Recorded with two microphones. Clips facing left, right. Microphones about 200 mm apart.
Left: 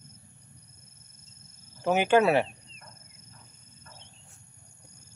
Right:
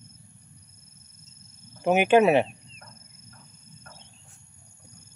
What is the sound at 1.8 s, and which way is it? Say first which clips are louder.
Speech: right 3 dB; 20° right (ahead or behind).